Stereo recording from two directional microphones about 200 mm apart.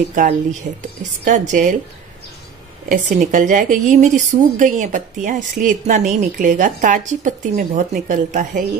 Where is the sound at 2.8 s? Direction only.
40° right (ahead or behind).